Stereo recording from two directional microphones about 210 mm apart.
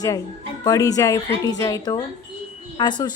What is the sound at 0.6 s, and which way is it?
Speech, 15° left (ahead or behind).